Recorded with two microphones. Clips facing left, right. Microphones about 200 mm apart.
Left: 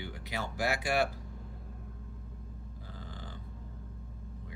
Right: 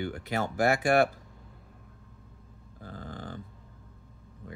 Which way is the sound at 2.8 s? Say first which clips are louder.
Right 8 dB; 50° right (ahead or behind).